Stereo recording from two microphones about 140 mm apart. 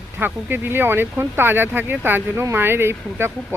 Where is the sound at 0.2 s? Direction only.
15° right (ahead or behind).